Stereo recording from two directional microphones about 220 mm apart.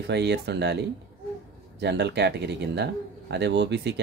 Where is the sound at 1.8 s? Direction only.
50° right (ahead or behind).